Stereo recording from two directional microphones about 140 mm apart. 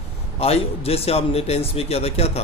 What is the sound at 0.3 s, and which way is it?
Speech, 45° left (ahead or behind).